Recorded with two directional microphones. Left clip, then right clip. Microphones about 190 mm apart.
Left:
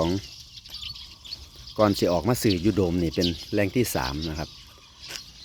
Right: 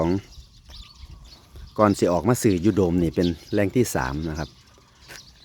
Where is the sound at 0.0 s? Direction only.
25° right (ahead or behind).